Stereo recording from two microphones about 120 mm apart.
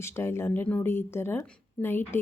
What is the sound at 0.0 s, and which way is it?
Speech, 20° left (ahead or behind).